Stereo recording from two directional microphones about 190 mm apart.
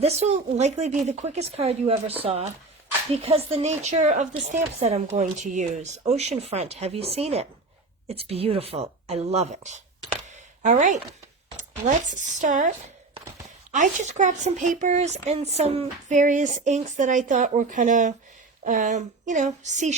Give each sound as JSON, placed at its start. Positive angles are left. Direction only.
{"t": 0.0, "sound": "speech", "side_deg": -35}
{"t": 12.0, "sound": "speech", "side_deg": -40}